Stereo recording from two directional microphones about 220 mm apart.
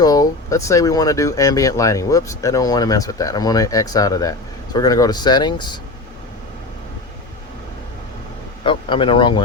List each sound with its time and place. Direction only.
0.0 s speech: 15° left (ahead or behind)
8.6 s speech: 25° left (ahead or behind)